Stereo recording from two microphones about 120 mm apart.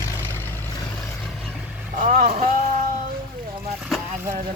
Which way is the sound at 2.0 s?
90° right.